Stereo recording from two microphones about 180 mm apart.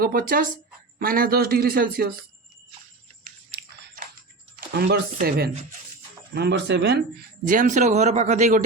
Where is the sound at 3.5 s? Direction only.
60° right (ahead or behind).